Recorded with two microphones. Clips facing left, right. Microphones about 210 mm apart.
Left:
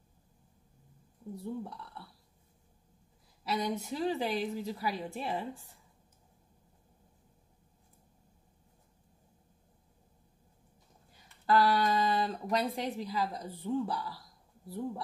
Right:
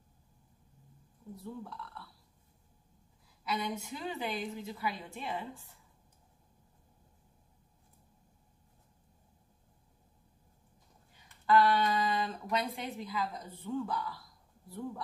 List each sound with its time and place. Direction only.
1.4 s speech: 25° left (ahead or behind)
3.4 s a woman's voice: 35° left (ahead or behind)
11.4 s a sound: 40° left (ahead or behind)
12.7 s a woman's voice: 35° left (ahead or behind)